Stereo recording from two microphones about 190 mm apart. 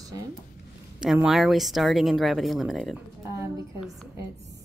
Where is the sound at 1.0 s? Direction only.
5° right (ahead or behind).